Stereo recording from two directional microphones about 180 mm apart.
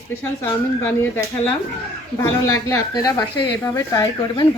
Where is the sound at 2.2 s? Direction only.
20° left (ahead or behind).